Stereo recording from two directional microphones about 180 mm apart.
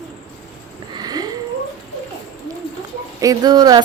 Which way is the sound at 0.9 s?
20° right (ahead or behind).